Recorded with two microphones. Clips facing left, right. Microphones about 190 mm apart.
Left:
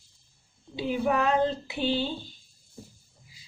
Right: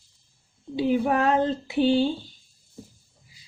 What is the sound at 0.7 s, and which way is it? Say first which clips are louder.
Speech: right 4 dB; 45° right (ahead or behind).